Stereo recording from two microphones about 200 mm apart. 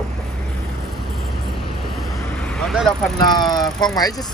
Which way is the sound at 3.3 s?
20° left (ahead or behind).